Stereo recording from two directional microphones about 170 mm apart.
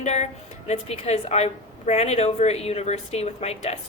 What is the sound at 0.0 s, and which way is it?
A woman's voice, 40° left (ahead or behind).